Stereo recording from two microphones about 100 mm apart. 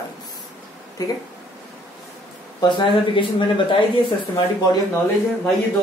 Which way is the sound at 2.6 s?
55° left (ahead or behind).